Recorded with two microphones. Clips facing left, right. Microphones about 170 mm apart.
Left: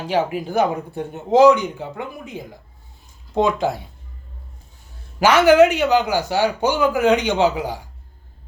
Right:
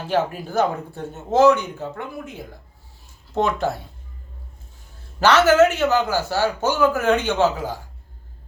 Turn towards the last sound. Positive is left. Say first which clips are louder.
# left 2 dB
turn(degrees=15)  # may be behind; listen again after turning